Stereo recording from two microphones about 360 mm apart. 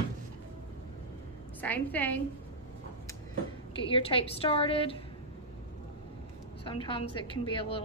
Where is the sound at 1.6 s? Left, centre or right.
Centre.